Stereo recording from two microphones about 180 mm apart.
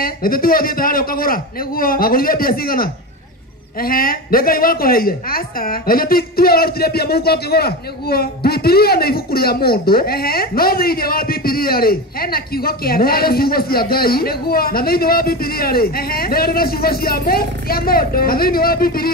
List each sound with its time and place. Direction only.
0.0 s a man's voice: 55° left (ahead or behind)